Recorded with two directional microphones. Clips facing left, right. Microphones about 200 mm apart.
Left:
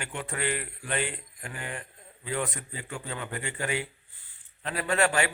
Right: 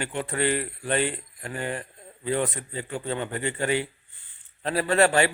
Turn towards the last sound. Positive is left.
turn(degrees=-30)  # may be behind; listen again after turning